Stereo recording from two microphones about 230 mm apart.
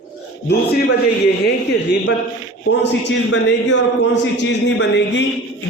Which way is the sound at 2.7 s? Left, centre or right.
Left.